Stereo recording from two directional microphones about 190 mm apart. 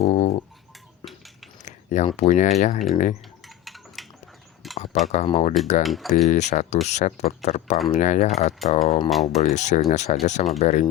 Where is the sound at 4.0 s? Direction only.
Centre (ahead or behind).